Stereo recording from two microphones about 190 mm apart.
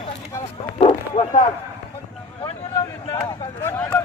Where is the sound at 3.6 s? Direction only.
15° left (ahead or behind).